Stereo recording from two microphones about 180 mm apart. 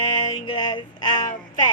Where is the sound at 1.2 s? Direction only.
45° left (ahead or behind).